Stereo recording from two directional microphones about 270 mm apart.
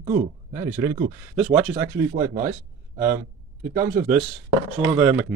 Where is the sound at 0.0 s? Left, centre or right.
Right.